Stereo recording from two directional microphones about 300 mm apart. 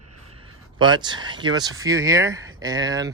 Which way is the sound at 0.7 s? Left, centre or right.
Centre.